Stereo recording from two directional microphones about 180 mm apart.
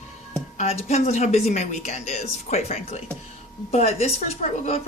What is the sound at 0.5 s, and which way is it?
Speech, 35° left (ahead or behind).